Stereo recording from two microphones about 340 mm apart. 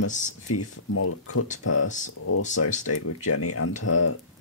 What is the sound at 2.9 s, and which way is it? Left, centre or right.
Speech, left.